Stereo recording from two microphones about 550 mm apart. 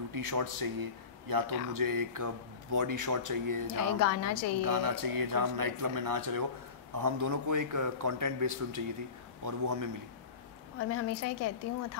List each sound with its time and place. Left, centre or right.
0.1 s a man's voice: right
4.0 s a woman's voice: left
4.6 s a man's voice: right
10.8 s a woman's voice: left